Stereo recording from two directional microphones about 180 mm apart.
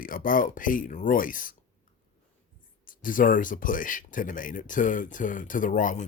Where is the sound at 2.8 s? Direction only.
50° left (ahead or behind).